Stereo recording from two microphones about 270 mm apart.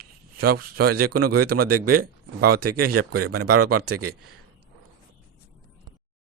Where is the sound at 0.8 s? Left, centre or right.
Right.